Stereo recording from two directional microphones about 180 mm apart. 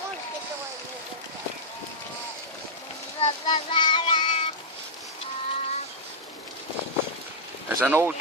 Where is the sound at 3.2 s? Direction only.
25° left (ahead or behind).